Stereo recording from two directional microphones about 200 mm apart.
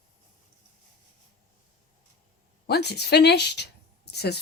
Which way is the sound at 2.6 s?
55° left (ahead or behind).